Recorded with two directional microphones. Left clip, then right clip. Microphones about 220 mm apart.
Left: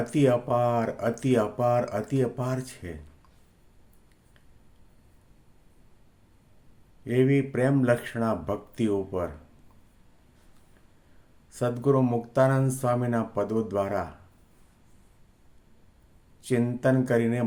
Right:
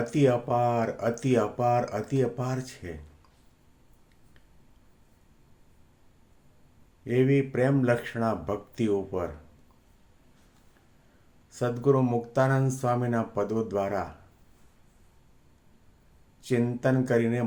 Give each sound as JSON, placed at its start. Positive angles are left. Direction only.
{"t": 0.0, "sound": "speech", "side_deg": 5}
{"t": 7.0, "sound": "speech", "side_deg": 5}
{"t": 11.5, "sound": "speech", "side_deg": 5}
{"t": 16.4, "sound": "speech", "side_deg": 5}